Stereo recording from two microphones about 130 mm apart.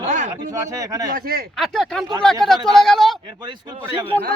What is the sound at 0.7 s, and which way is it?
Speech, 25° right (ahead or behind).